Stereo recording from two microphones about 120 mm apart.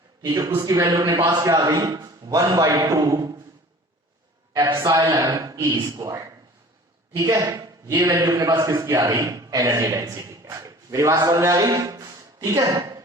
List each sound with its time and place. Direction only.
0.2 s a man's voice: 30° right (ahead or behind)
4.5 s a man's voice: 35° right (ahead or behind)